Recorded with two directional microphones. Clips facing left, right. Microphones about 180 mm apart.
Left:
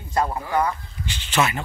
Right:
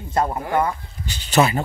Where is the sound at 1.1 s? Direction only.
40° right (ahead or behind).